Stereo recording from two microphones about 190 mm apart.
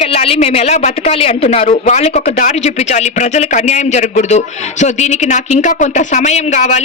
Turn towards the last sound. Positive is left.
turn(degrees=40)  # may be behind; listen again after turning